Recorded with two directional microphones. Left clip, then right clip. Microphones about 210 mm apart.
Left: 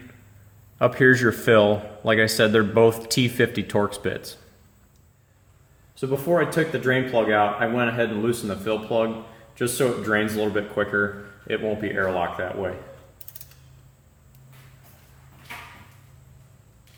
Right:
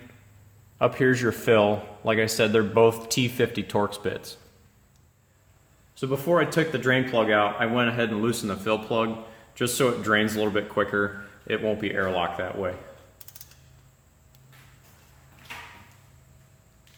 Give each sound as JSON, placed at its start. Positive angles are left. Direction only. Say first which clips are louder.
{"t": 0.8, "sound": "a man's voice", "louder": "left 5 dB", "side_deg": 5}
{"t": 5.9, "sound": "speech", "louder": "left 1 dB", "side_deg": -35}